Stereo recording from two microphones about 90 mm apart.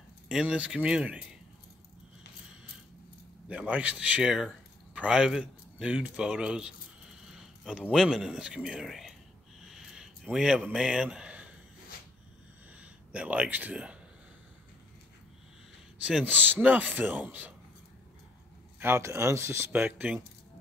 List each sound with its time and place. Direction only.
0.3 s speech: 10° right (ahead or behind)
3.4 s speech: 15° right (ahead or behind)
4.9 s a sound: 10° right (ahead or behind)
7.9 s speech: 5° right (ahead or behind)
9.7 s a sound: 5° right (ahead or behind)
12.8 s speech: 15° right (ahead or behind)
16.0 s speech: 10° right (ahead or behind)
16.3 s speech: 20° right (ahead or behind)
18.8 s speech: 25° right (ahead or behind)